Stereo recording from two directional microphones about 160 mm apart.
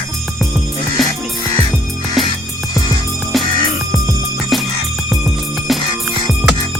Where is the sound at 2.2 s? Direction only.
Centre (ahead or behind).